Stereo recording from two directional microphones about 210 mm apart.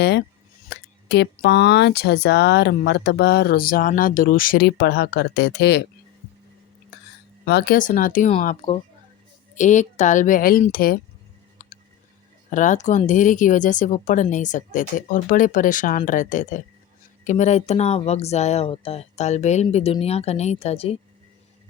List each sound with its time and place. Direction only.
0.0 s speech: 55° left (ahead or behind)
7.4 s speech: 45° left (ahead or behind)
12.5 s speech: 35° left (ahead or behind)